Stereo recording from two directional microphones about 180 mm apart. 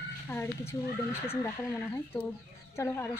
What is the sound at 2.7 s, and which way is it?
Speech, 15° left (ahead or behind).